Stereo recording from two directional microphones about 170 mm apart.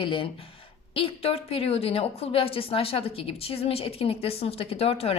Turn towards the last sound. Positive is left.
turn(degrees=35)  # may be behind; listen again after turning